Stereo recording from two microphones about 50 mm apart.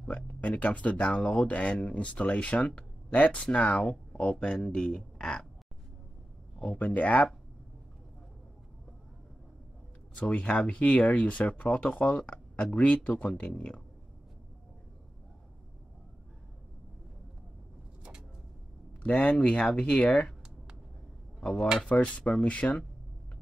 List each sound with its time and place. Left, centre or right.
0.1 s speech: left; by 5.5 s centre
6.6 s speech: left
10.2 s speech: left
19.0 s speech: left
21.4 s speech: centre
21.8 s speech: left